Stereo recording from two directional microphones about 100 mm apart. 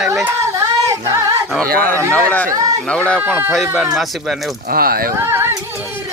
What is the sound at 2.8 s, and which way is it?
Speech, 10° left (ahead or behind).